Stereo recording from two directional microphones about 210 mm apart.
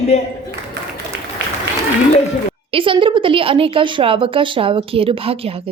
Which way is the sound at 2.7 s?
25° right (ahead or behind).